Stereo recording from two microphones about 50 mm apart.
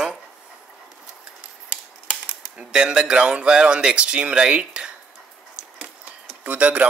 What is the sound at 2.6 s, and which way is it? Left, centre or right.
Speech, centre.